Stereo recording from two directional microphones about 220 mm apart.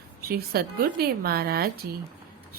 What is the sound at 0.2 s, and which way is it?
A woman's voice, 45° right (ahead or behind).